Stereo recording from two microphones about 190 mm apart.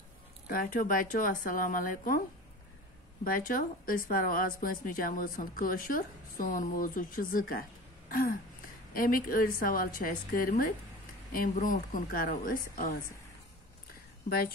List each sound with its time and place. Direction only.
0.5 s a woman's voice: 45° left (ahead or behind)
3.3 s a woman's voice: 45° left (ahead or behind)
8.1 s throat clearing: 50° left (ahead or behind)
8.9 s a woman's voice: 50° left (ahead or behind)